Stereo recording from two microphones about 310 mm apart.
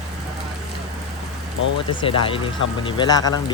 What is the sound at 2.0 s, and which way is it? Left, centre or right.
Speech, centre.